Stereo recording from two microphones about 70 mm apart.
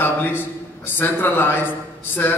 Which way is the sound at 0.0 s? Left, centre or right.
Left.